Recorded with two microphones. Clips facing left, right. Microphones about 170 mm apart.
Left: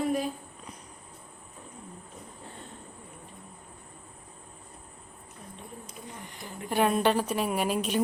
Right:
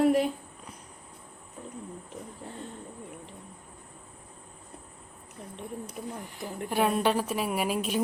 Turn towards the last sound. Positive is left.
turn(degrees=-5)  # may be behind; listen again after turning